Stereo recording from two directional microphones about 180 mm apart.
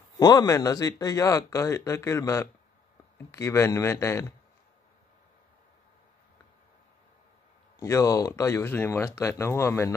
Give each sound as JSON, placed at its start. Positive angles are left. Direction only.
{"t": 0.2, "sound": "speech", "side_deg": 20}
{"t": 7.8, "sound": "speech", "side_deg": 15}